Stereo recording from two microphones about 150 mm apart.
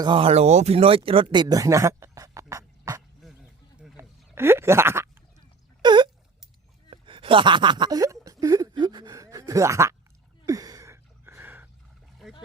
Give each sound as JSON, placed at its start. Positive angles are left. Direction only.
{"t": 0.0, "sound": "speech", "side_deg": -35}
{"t": 4.4, "sound": "speech", "side_deg": -15}
{"t": 5.8, "sound": "a sound", "side_deg": -30}